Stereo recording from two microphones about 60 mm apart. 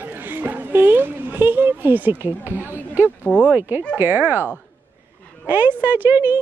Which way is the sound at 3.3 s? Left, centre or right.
Left.